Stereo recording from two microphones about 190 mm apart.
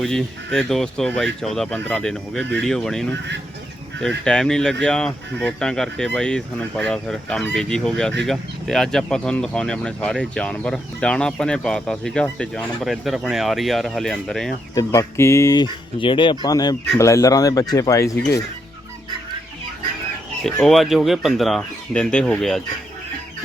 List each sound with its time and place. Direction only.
0.0 s speech: 5° left (ahead or behind)
4.2 s speech: 5° left (ahead or behind)
14.8 s speech: 15° left (ahead or behind)
20.4 s speech: centre (ahead or behind)